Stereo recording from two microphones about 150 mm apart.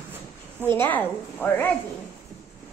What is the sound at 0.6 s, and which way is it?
A woman's voice, 15° left (ahead or behind).